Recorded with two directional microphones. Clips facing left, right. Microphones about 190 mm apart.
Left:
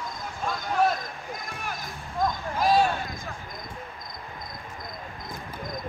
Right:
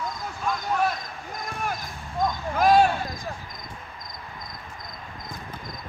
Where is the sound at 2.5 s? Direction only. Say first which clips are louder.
Right 4 dB; 50° right (ahead or behind).